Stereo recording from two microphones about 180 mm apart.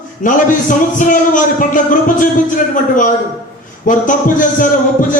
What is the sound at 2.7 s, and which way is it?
A man's voice, 45° left (ahead or behind).